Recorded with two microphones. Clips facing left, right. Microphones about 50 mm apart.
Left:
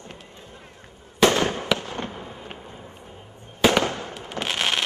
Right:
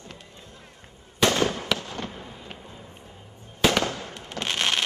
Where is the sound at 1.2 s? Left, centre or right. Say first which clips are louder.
Left 3 dB; left.